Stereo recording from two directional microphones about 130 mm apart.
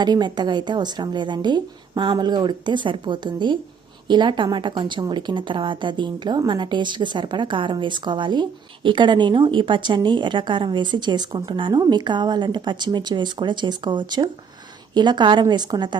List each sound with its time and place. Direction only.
0.0 s speech: 35° right (ahead or behind)